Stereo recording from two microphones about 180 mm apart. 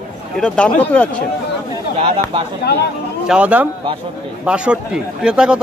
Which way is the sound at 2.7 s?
65° left (ahead or behind).